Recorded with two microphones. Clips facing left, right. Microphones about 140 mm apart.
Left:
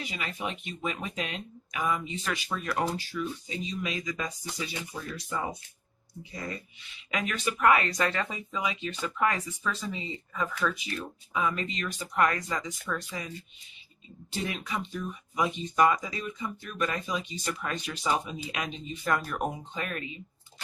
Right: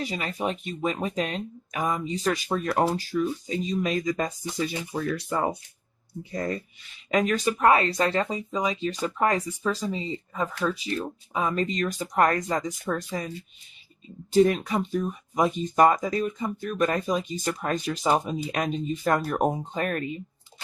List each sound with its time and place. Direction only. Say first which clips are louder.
0.0 s speech: right 6 dB; 40° right (ahead or behind); by 5.4 s 65° right (ahead or behind)
6.5 s speech: right 8 dB; 40° right (ahead or behind)
14.3 s speech: right 14 dB; 45° right (ahead or behind)